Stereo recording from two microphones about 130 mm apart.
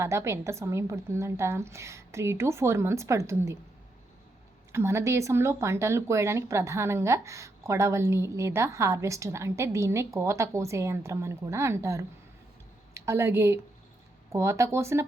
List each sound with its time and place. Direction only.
0.0 s speech: 20° right (ahead or behind)
4.7 s speech: 20° right (ahead or behind)